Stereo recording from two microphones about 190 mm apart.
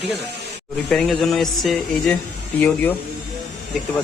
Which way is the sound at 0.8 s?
Centre (ahead or behind).